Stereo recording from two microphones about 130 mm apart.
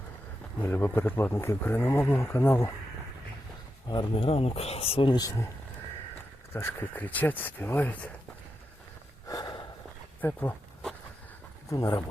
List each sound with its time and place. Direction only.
0.6 s speech: 15° left (ahead or behind)
3.8 s a man's voice: 40° left (ahead or behind)
6.5 s speech: 20° left (ahead or behind)
9.2 s snort: 25° left (ahead or behind)
10.2 s speech: 15° left (ahead or behind)
11.7 s speech: 25° left (ahead or behind)